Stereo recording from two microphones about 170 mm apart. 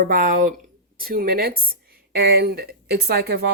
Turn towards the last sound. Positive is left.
turn(degrees=-70)  # may be behind; listen again after turning